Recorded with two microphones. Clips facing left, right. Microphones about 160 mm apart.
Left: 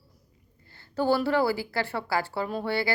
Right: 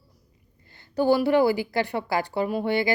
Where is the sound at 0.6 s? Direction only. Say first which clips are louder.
Right 4 dB; 20° right (ahead or behind).